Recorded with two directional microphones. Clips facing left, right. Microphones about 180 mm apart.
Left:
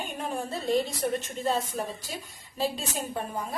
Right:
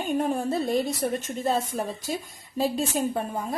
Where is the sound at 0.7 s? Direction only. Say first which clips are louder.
Right 1 dB; 45° right (ahead or behind).